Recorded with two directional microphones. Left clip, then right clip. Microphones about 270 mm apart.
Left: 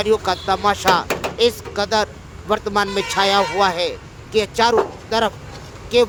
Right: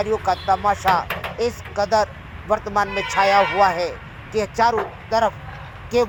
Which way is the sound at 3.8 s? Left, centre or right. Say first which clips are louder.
Left 2 dB; left.